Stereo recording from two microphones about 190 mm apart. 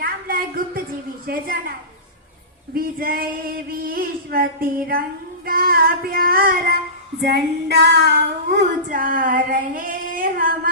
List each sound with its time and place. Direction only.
0.0 s a sound: 50° right (ahead or behind)
1.3 s child singing: 50° right (ahead or behind)
2.7 s child singing: 50° right (ahead or behind)
5.5 s child singing: 50° right (ahead or behind)
7.3 s child singing: 60° right (ahead or behind)